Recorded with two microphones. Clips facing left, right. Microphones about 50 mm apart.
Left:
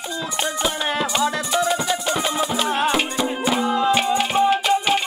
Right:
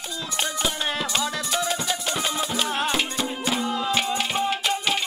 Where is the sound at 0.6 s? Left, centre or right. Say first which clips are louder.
Left 6 dB; centre.